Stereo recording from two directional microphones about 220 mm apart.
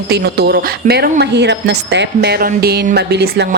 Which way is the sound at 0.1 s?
45° right (ahead or behind).